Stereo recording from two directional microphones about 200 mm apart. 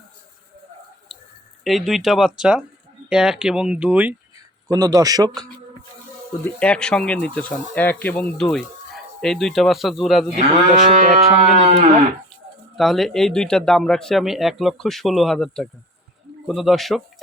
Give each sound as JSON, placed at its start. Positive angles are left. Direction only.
{"t": 1.6, "sound": "speech", "side_deg": 0}
{"t": 4.7, "sound": "speech", "side_deg": -20}
{"t": 6.4, "sound": "speech", "side_deg": 5}
{"t": 10.3, "sound": "cattle", "side_deg": -35}
{"t": 12.7, "sound": "speech", "side_deg": 0}